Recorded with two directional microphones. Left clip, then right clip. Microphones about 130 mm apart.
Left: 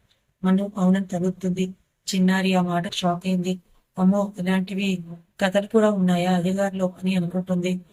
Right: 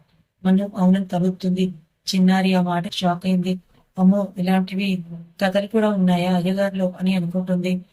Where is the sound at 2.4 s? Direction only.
5° right (ahead or behind).